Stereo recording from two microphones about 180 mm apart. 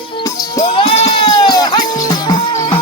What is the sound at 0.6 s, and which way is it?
Goat, 35° left (ahead or behind).